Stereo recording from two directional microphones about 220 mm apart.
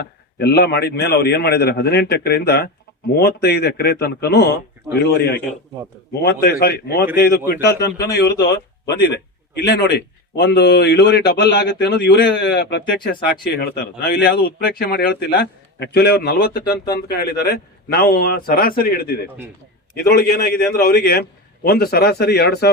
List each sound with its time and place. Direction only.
0.0 s a man's voice: 45° left (ahead or behind)